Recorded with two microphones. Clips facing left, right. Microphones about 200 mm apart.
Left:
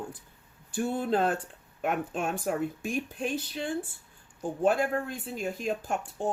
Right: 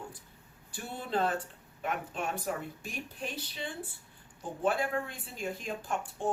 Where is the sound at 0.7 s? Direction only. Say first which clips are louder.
Left 9 dB; 50° left (ahead or behind).